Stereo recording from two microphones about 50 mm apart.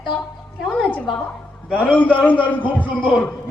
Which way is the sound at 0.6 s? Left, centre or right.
Centre.